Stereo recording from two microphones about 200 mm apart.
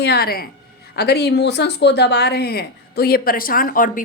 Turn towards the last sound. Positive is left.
turn(degrees=45)  # may be behind; listen again after turning